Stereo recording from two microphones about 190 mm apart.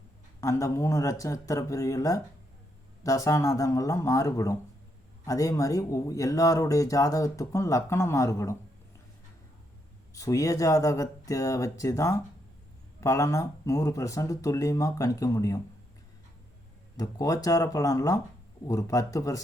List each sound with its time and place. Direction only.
0.4 s speech: 15° left (ahead or behind)
10.2 s speech: 15° left (ahead or behind)
17.0 s speech: 20° left (ahead or behind)